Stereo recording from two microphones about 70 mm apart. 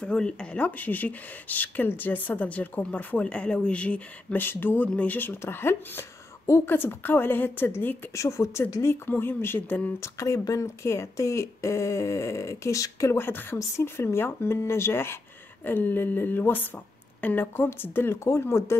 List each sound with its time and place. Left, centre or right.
0.0 s speech: centre; by 8.0 s left
8.1 s speech: left
8.8 s a woman's voice: left
9.9 s speech: left
13.2 s a woman's voice: left